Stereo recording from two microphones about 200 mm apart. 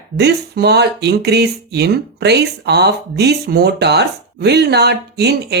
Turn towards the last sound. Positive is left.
turn(degrees=-55)  # may be behind; listen again after turning